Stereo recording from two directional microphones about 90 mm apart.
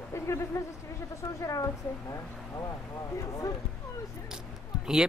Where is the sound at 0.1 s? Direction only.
30° left (ahead or behind).